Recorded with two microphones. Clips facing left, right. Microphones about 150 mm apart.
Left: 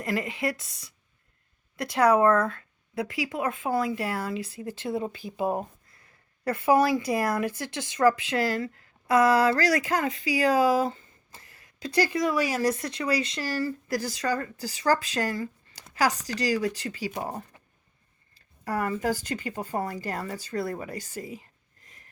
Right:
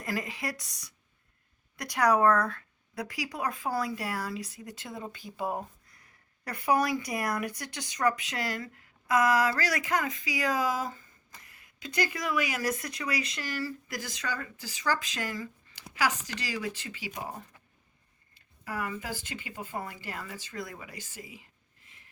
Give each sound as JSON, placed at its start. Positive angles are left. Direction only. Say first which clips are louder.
{"t": 0.0, "sound": "speech", "louder": "left 6 dB", "side_deg": 25}
{"t": 17.5, "sound": "a sound", "louder": "left 4 dB", "side_deg": 20}
{"t": 18.3, "sound": "speech", "louder": "left 7 dB", "side_deg": 40}